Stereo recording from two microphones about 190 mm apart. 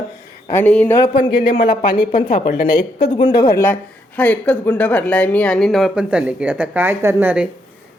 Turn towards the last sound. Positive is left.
turn(degrees=-5)  # may be behind; listen again after turning